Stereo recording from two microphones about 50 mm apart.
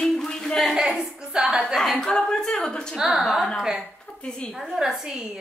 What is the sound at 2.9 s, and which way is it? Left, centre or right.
Speech, centre.